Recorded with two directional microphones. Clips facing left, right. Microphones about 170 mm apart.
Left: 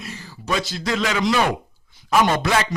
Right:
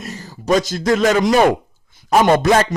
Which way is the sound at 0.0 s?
40° right (ahead or behind).